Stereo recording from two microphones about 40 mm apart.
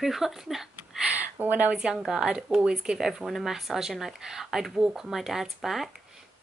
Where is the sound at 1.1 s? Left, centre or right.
Right.